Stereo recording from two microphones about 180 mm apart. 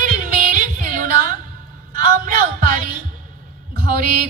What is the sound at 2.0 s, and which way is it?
Music, 50° right (ahead or behind).